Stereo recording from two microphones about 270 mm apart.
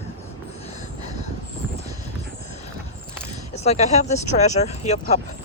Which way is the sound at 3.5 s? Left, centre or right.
Left.